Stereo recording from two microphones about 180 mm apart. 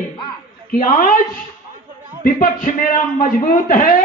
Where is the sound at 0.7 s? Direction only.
50° left (ahead or behind).